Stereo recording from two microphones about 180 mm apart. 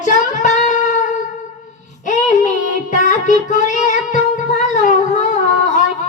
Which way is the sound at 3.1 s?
45° left (ahead or behind).